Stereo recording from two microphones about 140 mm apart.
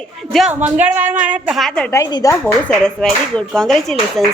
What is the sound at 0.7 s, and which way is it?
Speech, 10° right (ahead or behind).